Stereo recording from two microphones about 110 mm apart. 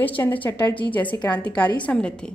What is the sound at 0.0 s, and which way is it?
A woman's voice, 15° left (ahead or behind).